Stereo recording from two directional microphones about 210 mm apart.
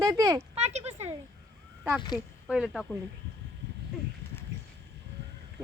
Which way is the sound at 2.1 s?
5° right (ahead or behind).